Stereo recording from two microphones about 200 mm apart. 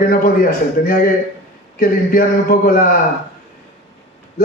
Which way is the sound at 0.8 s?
40° left (ahead or behind).